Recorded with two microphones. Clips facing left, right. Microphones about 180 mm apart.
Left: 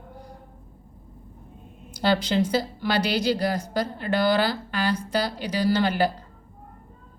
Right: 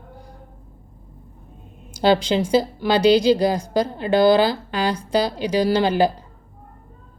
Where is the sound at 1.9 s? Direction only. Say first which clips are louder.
Right 5 dB; 10° right (ahead or behind).